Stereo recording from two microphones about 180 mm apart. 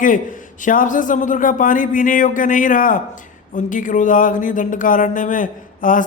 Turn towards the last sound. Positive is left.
turn(degrees=45)  # may be behind; listen again after turning